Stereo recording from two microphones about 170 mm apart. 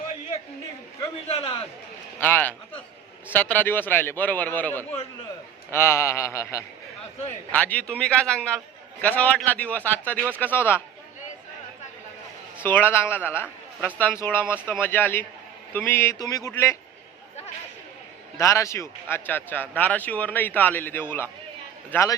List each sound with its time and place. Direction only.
1.3 s a man's voice: 35° left (ahead or behind)
2.2 s a man's voice: 10° left (ahead or behind)
12.6 s a man's voice: 10° left (ahead or behind)
18.3 s a man's voice: 15° left (ahead or behind)